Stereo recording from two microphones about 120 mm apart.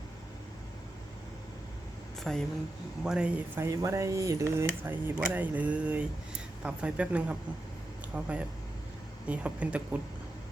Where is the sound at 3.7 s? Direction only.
25° right (ahead or behind).